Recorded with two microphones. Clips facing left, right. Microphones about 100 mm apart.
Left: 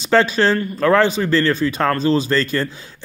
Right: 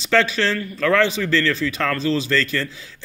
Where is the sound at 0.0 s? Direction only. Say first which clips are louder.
Left 4 dB; 40° left (ahead or behind).